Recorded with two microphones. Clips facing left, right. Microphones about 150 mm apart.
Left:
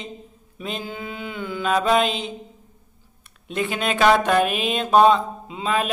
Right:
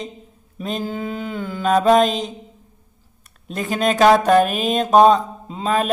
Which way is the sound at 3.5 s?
40° right (ahead or behind).